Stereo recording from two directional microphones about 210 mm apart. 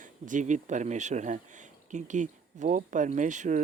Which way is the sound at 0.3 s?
35° right (ahead or behind).